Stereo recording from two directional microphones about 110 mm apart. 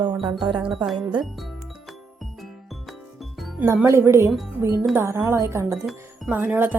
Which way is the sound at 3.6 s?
20° right (ahead or behind).